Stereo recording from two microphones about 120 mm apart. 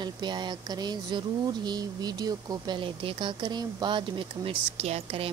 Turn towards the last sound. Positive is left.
turn(degrees=-55)  # may be behind; listen again after turning